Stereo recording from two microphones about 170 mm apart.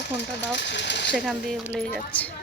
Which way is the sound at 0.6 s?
90° left.